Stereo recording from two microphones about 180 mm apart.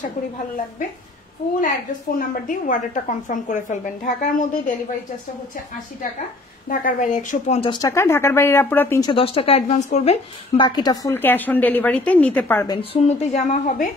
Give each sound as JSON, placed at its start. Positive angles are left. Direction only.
{"t": 1.6, "sound": "a woman's voice", "side_deg": 50}
{"t": 6.7, "sound": "a woman's voice", "side_deg": 50}
{"t": 7.7, "sound": "a woman's voice", "side_deg": 15}
{"t": 9.0, "sound": "speech", "side_deg": 30}
{"t": 10.6, "sound": "a woman's voice", "side_deg": 25}
{"t": 12.6, "sound": "speech", "side_deg": 30}